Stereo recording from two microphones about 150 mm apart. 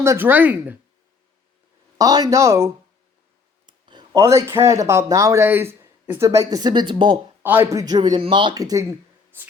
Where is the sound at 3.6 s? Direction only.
30° right (ahead or behind).